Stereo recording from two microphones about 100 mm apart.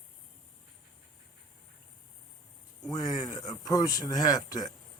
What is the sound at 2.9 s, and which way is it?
Speech, 45° left (ahead or behind).